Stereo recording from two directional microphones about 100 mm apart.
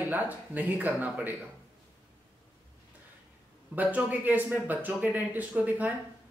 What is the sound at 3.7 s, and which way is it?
Speech, 15° right (ahead or behind).